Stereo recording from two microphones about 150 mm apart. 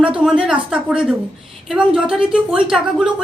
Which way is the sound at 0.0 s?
5° right (ahead or behind).